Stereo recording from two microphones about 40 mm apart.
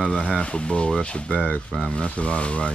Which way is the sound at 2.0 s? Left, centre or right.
Left.